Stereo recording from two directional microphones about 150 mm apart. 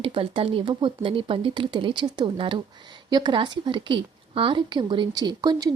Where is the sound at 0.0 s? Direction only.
40° right (ahead or behind).